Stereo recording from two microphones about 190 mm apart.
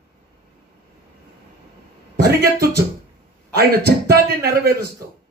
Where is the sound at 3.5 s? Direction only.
55° right (ahead or behind).